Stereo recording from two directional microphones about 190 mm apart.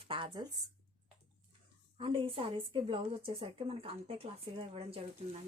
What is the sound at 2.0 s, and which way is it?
A woman's voice, 30° right (ahead or behind).